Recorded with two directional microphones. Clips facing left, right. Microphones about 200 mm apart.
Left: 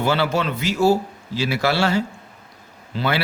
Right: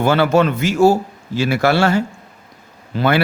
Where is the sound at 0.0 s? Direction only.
50° right (ahead or behind).